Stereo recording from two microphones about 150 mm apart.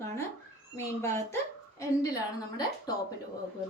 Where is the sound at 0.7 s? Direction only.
20° left (ahead or behind).